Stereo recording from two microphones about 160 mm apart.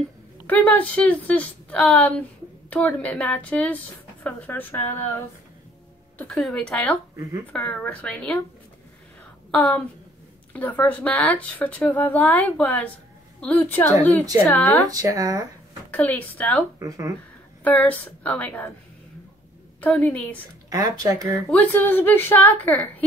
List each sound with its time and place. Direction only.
0.5 s a woman's voice: 10° left (ahead or behind)
9.5 s a woman's voice: 10° left (ahead or behind)
14.9 s speech: 20° right (ahead or behind)
15.9 s a woman's voice: 10° left (ahead or behind)
16.8 s speech: 20° right (ahead or behind)
17.6 s a woman's voice: 10° left (ahead or behind)
19.8 s a woman's voice: 10° left (ahead or behind)
20.7 s speech: 25° right (ahead or behind)
21.3 s a woman's voice: 5° left (ahead or behind)